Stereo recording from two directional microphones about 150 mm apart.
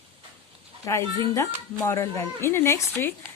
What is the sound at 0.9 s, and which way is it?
Speech, 20° left (ahead or behind).